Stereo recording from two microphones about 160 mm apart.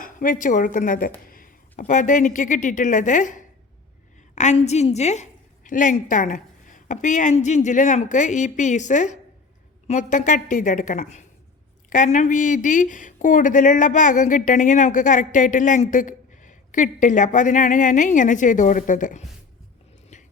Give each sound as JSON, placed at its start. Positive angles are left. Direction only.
{"t": 0.0, "sound": "a woman's voice", "side_deg": 55}
{"t": 1.3, "sound": "a sound", "side_deg": 60}
{"t": 1.8, "sound": "speech", "side_deg": 55}